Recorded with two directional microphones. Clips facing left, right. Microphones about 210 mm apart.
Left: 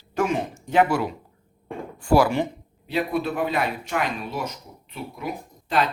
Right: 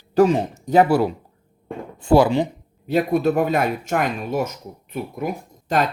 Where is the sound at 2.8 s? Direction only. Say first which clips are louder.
Right 6 dB; 45° right (ahead or behind).